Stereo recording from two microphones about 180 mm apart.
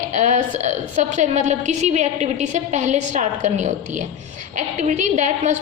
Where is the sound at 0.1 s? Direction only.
40° right (ahead or behind).